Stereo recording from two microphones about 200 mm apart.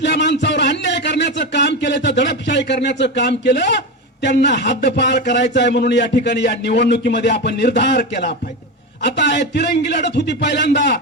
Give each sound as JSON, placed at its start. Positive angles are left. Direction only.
{"t": 0.0, "sound": "a man's voice", "side_deg": 60}